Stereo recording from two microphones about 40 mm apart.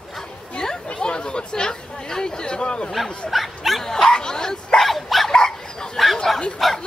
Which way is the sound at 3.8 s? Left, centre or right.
Centre.